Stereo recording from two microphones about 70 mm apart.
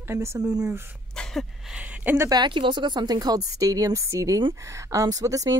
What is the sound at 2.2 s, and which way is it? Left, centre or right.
Speech, right.